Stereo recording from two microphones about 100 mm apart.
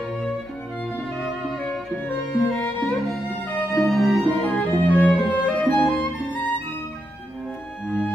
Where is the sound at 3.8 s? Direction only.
5° left (ahead or behind).